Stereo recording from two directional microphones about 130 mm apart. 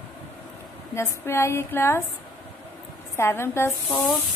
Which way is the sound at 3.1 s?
20° left (ahead or behind).